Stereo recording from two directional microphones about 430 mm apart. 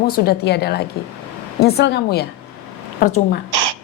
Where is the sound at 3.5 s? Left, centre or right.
Right.